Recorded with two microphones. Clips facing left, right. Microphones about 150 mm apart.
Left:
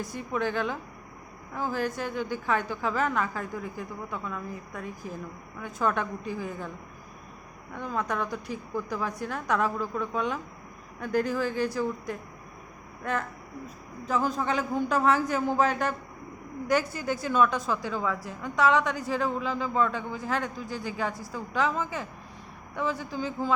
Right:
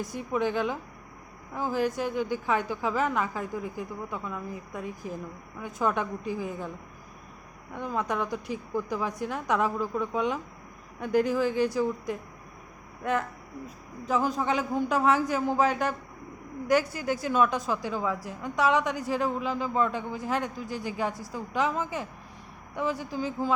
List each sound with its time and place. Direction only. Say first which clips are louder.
0.0 s a woman's voice: right 2 dB; 15° right (ahead or behind)
7.7 s a woman's voice: right 1 dB; 15° right (ahead or behind)